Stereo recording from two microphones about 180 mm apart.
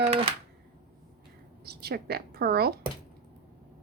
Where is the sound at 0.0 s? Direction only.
30° right (ahead or behind).